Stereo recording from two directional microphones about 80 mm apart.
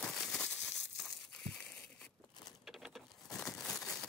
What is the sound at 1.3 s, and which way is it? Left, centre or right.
Crumpling, centre.